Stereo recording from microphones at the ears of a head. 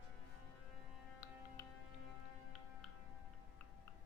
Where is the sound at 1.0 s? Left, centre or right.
Left.